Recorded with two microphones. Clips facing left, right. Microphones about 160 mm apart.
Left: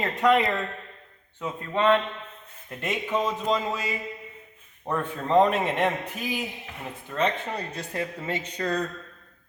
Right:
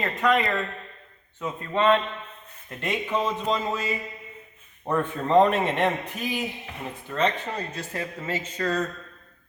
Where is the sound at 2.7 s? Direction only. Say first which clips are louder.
Right 1 dB; 10° left (ahead or behind).